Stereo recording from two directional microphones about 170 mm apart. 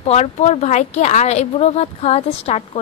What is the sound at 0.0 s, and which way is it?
A woman's voice, 40° left (ahead or behind).